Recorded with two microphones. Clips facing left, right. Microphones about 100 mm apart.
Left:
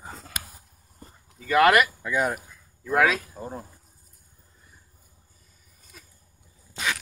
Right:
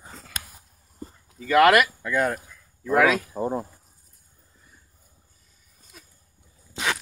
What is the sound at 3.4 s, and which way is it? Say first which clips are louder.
Speech: right 10 dB; 30° right (ahead or behind).